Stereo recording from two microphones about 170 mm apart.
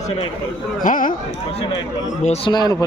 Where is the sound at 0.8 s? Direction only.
50° left (ahead or behind).